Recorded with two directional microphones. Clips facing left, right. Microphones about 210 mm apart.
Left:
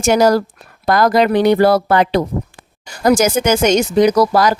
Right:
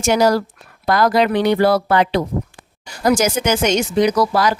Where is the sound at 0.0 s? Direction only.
45° left (ahead or behind).